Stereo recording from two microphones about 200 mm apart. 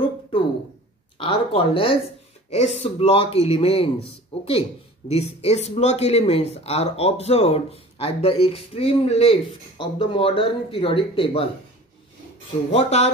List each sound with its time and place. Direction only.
1.1 s speech: 25° left (ahead or behind)
12.7 s speech: 35° left (ahead or behind)